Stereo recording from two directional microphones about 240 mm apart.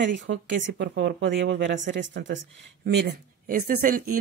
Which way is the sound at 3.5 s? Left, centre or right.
Right.